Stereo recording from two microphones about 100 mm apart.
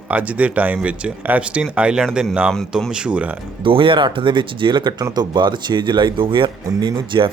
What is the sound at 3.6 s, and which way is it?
Speech, 60° right (ahead or behind).